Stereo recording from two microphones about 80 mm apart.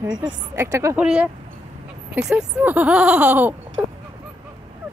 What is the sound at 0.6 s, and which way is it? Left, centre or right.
Speech, right.